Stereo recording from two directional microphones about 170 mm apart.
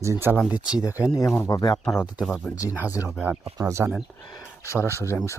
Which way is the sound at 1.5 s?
25° left (ahead or behind).